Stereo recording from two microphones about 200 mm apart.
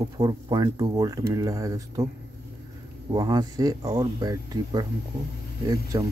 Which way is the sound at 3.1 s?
20° right (ahead or behind).